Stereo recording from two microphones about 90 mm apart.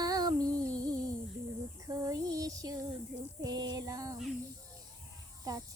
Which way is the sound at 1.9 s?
40° right (ahead or behind).